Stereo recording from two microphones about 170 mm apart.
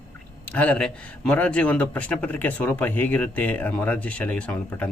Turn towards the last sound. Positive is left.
turn(degrees=10)  # may be behind; listen again after turning